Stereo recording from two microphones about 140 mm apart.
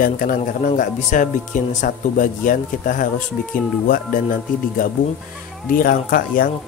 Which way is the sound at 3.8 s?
85° left.